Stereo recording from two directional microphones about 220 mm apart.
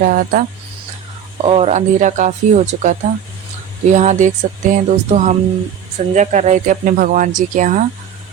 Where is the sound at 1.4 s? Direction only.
25° right (ahead or behind).